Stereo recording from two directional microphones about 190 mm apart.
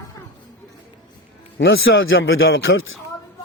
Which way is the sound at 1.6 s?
80° left.